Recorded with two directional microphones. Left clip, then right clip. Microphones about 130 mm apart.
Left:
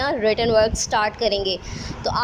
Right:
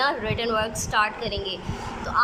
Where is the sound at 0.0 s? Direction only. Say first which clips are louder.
Left 5 dB; 50° left (ahead or behind).